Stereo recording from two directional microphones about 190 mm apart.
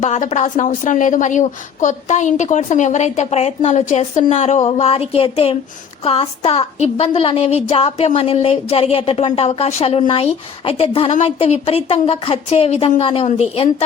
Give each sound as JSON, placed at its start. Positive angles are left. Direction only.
{"t": 0.0, "sound": "a woman's voice", "side_deg": 35}